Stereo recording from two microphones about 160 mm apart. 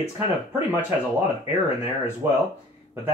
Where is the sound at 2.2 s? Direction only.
15° right (ahead or behind).